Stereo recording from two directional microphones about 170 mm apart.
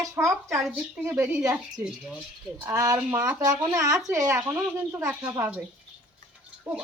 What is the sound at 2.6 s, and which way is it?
Speech, 20° right (ahead or behind).